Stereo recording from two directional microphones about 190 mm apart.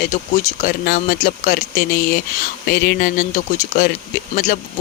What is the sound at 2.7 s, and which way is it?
Speech, 55° left (ahead or behind).